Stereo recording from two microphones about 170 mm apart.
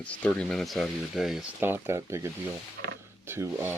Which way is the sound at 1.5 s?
15° right (ahead or behind).